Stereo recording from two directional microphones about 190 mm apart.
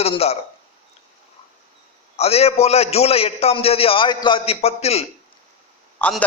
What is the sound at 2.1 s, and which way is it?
A man's voice, 30° left (ahead or behind).